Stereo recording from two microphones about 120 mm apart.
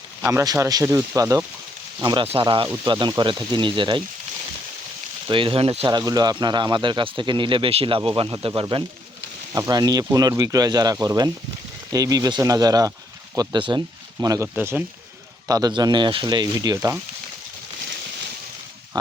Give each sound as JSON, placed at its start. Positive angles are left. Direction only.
{"t": 0.3, "sound": "speech", "side_deg": -25}
{"t": 5.3, "sound": "speech", "side_deg": -50}
{"t": 5.9, "sound": "speech", "side_deg": -30}
{"t": 9.5, "sound": "speech", "side_deg": -30}
{"t": 14.2, "sound": "speech", "side_deg": -25}
{"t": 14.5, "sound": "speech", "side_deg": -15}
{"t": 15.4, "sound": "speech", "side_deg": -30}